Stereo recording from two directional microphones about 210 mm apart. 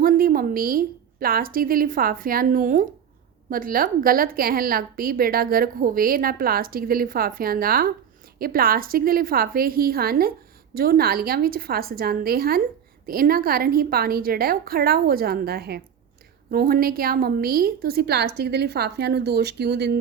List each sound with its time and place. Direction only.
0.0 s a woman's voice: 45° right (ahead or behind)